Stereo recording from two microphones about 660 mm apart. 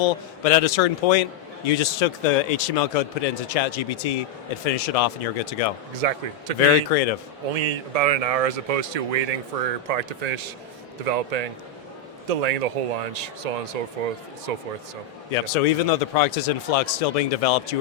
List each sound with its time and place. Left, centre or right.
0.0 s a man's voice: left
6.0 s speech: right
6.9 s a man's voice: left
7.5 s speech: right
15.3 s a man's voice: left